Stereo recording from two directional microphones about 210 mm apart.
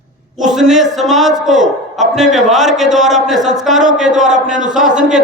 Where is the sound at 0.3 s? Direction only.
Centre (ahead or behind).